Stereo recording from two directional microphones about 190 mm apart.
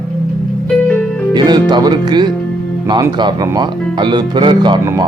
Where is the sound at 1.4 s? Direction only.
20° right (ahead or behind).